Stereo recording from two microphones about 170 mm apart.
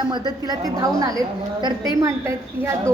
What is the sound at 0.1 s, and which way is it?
A woman's voice, 25° right (ahead or behind).